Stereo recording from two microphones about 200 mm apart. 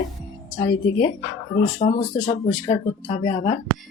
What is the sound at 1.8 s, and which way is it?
Speech, 30° left (ahead or behind).